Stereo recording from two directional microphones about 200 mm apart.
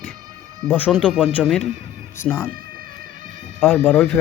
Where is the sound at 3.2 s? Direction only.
40° right (ahead or behind).